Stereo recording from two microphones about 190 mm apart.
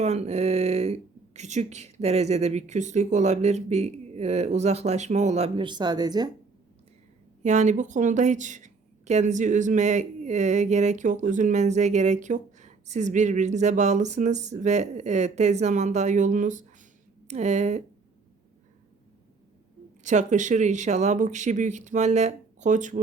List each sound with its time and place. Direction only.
0.0 s speech: 35° right (ahead or behind)
7.4 s speech: 40° right (ahead or behind)
20.1 s speech: 40° right (ahead or behind)